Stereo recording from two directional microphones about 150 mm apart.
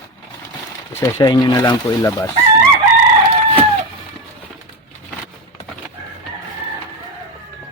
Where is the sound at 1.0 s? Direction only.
30° left (ahead or behind).